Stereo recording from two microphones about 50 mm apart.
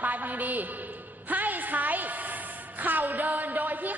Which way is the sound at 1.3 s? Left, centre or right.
Right.